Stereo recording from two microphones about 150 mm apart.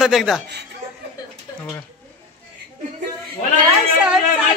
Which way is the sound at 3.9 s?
5° right (ahead or behind).